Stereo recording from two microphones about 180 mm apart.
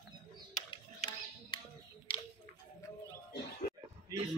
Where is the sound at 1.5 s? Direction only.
25° left (ahead or behind).